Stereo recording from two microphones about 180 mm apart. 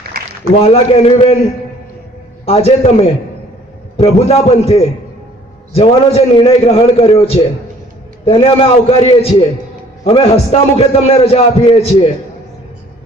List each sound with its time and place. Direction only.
0.6 s a man's voice: 35° left (ahead or behind)
2.5 s a man's voice: 35° left (ahead or behind)